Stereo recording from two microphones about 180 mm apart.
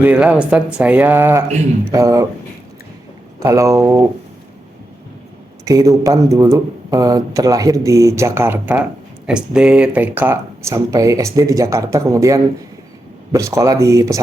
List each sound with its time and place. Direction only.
0.0 s speech: 10° right (ahead or behind)
3.4 s speech: 15° right (ahead or behind)
5.6 s speech: 20° right (ahead or behind)